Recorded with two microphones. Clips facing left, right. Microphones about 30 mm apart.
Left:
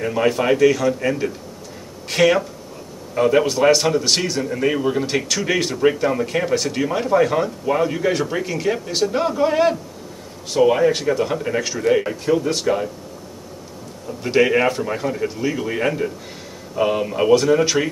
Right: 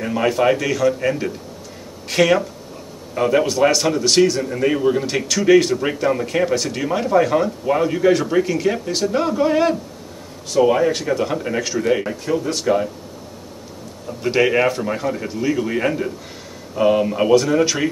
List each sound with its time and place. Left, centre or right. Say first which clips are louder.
0.0 s a man's voice: right 1 dB; centre
12.3 s speech: left 2 dB; centre
12.6 s a man's voice: right 2 dB; centre
14.0 s a man's voice: even; centre